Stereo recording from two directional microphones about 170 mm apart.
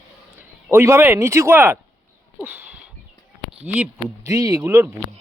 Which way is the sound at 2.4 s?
10° right (ahead or behind).